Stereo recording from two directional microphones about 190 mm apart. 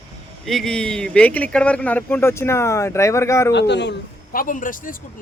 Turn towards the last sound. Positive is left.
turn(degrees=45)  # may be behind; listen again after turning